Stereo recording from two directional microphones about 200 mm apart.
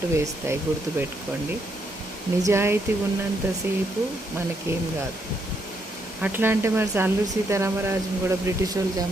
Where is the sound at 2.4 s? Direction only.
10° right (ahead or behind).